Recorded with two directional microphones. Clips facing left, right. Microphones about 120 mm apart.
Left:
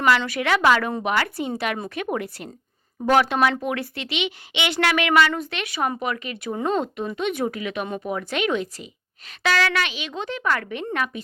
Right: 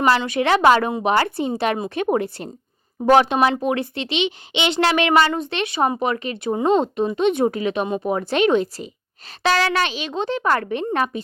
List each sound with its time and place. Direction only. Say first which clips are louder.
0.3 s speech: right 4 dB; 30° right (ahead or behind)